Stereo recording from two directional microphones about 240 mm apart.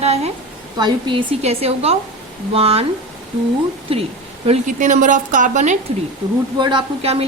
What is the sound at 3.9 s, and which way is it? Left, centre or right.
A woman's voice, right.